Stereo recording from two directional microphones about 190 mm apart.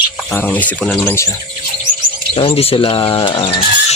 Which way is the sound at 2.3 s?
30° left (ahead or behind).